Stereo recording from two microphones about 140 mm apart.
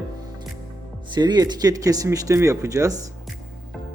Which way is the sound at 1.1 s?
30° right (ahead or behind).